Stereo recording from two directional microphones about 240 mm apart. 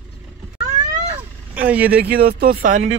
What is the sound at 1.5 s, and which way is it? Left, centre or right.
Speech, centre.